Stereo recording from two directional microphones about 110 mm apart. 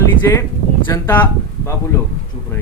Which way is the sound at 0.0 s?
25° left (ahead or behind).